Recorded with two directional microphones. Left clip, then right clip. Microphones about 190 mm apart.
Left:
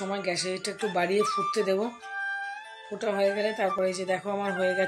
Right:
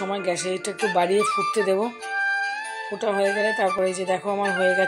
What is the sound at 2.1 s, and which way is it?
Music, 50° right (ahead or behind).